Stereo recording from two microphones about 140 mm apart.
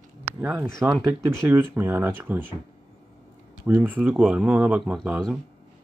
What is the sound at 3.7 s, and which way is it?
Speech, 10° right (ahead or behind).